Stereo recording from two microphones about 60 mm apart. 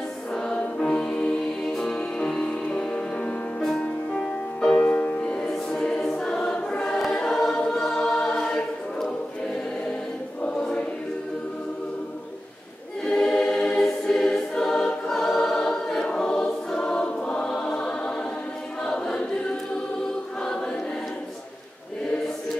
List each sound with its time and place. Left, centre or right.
0.3 s music: centre
4.7 s music: left
5.2 s music: centre
5.5 s choir: centre
13.1 s choir: centre
13.7 s music: centre
14.6 s choir: centre